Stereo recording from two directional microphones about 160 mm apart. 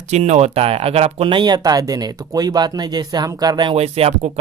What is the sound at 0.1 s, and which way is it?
Speech, 45° right (ahead or behind).